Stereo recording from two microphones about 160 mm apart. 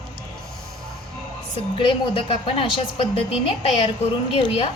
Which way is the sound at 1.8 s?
30° left (ahead or behind).